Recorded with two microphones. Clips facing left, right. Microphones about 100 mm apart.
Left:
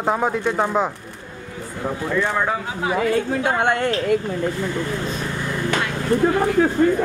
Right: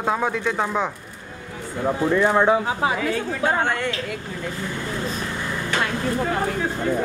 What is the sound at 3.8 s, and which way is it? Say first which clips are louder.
Speech: left 7 dB; 40° left (ahead or behind).